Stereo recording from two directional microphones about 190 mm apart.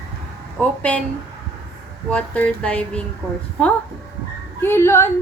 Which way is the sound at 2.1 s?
5° left (ahead or behind).